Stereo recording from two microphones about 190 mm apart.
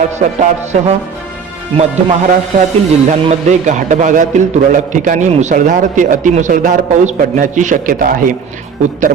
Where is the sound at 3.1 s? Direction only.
40° right (ahead or behind).